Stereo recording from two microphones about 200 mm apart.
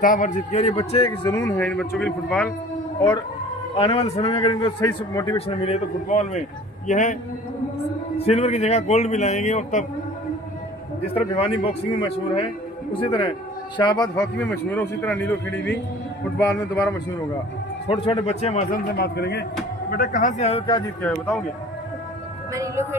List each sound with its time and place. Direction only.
0.0 s a man's voice: 40° left (ahead or behind)
1.4 s speech: 5° left (ahead or behind)
3.7 s a man's voice: 25° left (ahead or behind)
5.5 s a man's voice: 30° left (ahead or behind)
8.2 s a man's voice: 30° left (ahead or behind)
11.1 s a man's voice: 30° left (ahead or behind)
17.8 s a man's voice: 30° left (ahead or behind)
18.9 s speech: 55° left (ahead or behind)
19.9 s a man's voice: 45° left (ahead or behind); by 20.8 s 30° left (ahead or behind)
21.0 s speech: 10° left (ahead or behind)
22.5 s speech: 15° right (ahead or behind)